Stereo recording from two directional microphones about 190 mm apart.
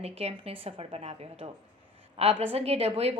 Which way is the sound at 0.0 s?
30° right (ahead or behind).